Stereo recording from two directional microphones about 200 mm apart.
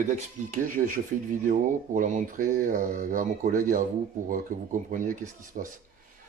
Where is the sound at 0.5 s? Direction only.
40° right (ahead or behind).